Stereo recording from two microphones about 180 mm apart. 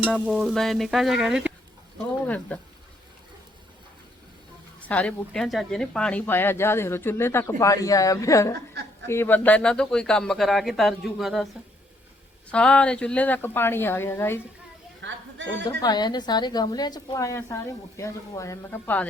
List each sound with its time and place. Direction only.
0.1 s speech: centre (ahead or behind)
2.2 s speech: 10° left (ahead or behind)
4.8 s speech: 5° left (ahead or behind)
12.5 s speech: 5° left (ahead or behind)
15.0 s speech: 90° right
15.7 s a woman's voice: 20° left (ahead or behind)